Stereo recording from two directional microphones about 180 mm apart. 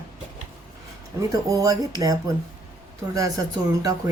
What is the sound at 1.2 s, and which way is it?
Speech, 20° right (ahead or behind).